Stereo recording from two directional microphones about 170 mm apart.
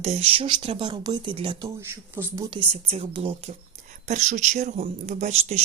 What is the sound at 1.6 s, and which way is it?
Speech, 15° right (ahead or behind).